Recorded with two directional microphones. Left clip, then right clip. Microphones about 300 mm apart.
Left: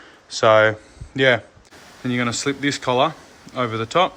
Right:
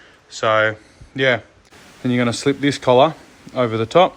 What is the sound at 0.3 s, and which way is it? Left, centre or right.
Speech, centre.